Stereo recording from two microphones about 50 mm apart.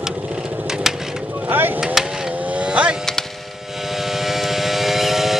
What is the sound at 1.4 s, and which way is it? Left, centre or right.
Speech, right.